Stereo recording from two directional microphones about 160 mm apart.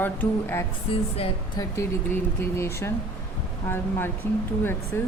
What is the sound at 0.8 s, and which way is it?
Speech, 35° left (ahead or behind).